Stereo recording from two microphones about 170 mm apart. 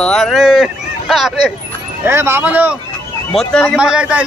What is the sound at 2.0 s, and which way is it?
Speech, 15° right (ahead or behind).